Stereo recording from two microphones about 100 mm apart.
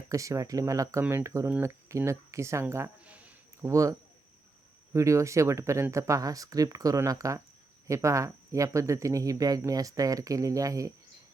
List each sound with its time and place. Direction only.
0.1 s speech: 30° right (ahead or behind)
3.0 s a sound: 15° right (ahead or behind)
3.6 s speech: 30° right (ahead or behind)
4.9 s speech: 30° right (ahead or behind)